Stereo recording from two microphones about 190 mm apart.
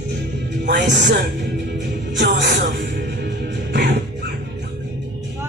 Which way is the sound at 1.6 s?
70° right (ahead or behind).